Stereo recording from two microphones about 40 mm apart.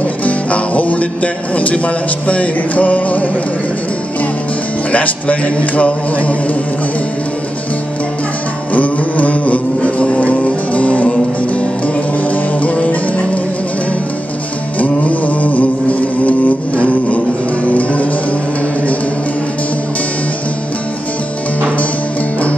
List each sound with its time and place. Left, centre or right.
0.0 s music: left
2.2 s a man's voice: left
4.9 s a man's voice: left
8.7 s music: left
14.8 s music: left